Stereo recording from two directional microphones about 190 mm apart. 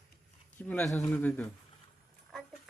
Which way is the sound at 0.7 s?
10° left (ahead or behind).